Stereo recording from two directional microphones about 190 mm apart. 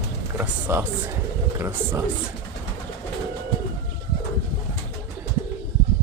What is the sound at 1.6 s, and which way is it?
Speech, 15° right (ahead or behind).